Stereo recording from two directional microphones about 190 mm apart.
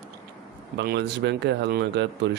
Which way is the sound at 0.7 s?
60° right (ahead or behind).